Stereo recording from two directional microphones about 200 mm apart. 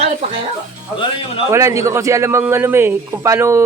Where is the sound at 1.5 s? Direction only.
15° right (ahead or behind).